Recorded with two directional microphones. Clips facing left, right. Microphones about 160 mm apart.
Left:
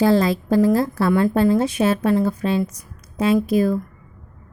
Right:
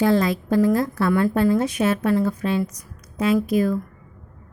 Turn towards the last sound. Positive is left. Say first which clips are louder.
# left 2 dB
turn(degrees=30)  # may be behind; listen again after turning